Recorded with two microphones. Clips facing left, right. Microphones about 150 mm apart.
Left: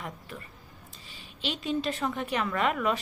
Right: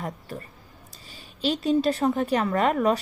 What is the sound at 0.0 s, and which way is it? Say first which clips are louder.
Speech: right 6 dB; 40° right (ahead or behind).